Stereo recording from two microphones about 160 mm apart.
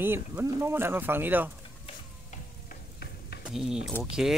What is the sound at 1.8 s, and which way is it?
Sizzle, 50° left (ahead or behind).